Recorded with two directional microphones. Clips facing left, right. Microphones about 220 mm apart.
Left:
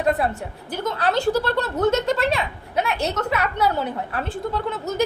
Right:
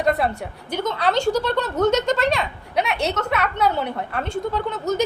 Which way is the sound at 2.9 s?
65° right (ahead or behind).